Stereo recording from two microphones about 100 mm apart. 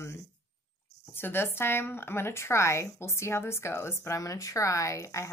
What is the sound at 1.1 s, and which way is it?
Speech, 20° left (ahead or behind).